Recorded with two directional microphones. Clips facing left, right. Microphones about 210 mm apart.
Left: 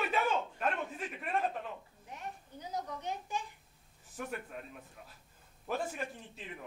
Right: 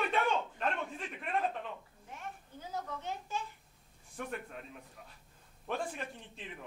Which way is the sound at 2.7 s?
15° left (ahead or behind).